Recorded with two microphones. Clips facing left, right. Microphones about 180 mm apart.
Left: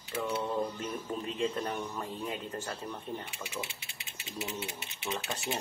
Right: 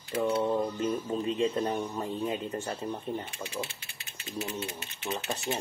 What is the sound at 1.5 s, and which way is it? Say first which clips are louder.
Speech: right 5 dB; 25° right (ahead or behind).